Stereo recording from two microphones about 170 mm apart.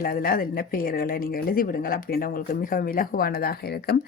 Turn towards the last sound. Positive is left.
turn(degrees=65)  # may be behind; listen again after turning